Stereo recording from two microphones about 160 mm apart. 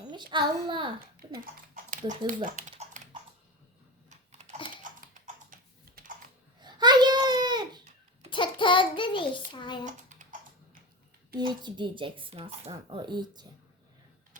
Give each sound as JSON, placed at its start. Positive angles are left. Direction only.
{"t": 0.1, "sound": "speech", "side_deg": -30}
{"t": 1.3, "sound": "speech", "side_deg": -60}
{"t": 4.1, "sound": "typing", "side_deg": -45}
{"t": 4.8, "sound": "typing", "side_deg": -55}
{"t": 6.6, "sound": "a sound", "side_deg": -25}
{"t": 8.3, "sound": "child singing", "side_deg": 30}
{"t": 9.5, "sound": "a child's voice", "side_deg": 30}
{"t": 9.8, "sound": "typing", "side_deg": -50}
{"t": 11.3, "sound": "speech", "side_deg": -30}